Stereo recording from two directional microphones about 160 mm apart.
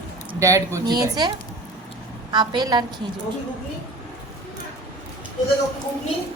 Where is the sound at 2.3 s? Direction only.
25° right (ahead or behind).